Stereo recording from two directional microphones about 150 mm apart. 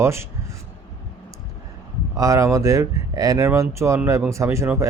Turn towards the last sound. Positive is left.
turn(degrees=-15)  # may be behind; listen again after turning